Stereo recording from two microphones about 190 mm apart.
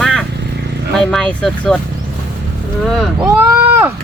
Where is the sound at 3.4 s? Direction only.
10° right (ahead or behind).